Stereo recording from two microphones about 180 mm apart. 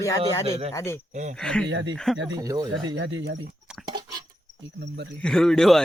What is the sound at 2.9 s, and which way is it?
Speech, 80° right.